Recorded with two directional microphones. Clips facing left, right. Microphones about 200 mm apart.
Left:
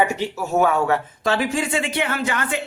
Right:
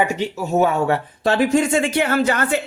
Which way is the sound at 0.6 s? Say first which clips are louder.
Right 1 dB; 30° right (ahead or behind).